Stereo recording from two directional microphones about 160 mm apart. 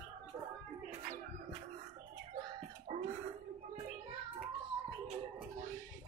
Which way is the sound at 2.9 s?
50° right (ahead or behind).